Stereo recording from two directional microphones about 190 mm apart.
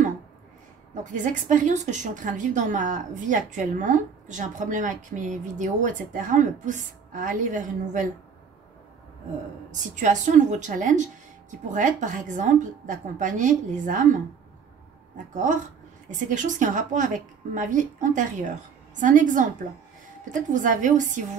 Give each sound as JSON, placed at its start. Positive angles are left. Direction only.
{"t": 1.0, "sound": "a woman's voice", "side_deg": -40}
{"t": 9.7, "sound": "a woman's voice", "side_deg": -40}
{"t": 15.1, "sound": "a woman's voice", "side_deg": -40}
{"t": 20.5, "sound": "a woman's voice", "side_deg": -45}